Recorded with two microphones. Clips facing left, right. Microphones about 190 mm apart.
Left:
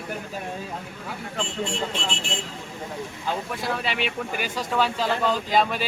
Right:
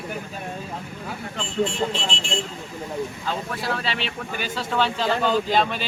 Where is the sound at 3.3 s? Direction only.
15° left (ahead or behind).